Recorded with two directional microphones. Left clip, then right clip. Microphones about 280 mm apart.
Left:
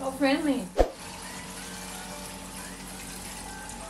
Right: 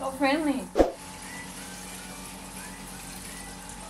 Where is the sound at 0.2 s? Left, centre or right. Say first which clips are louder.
Even; centre.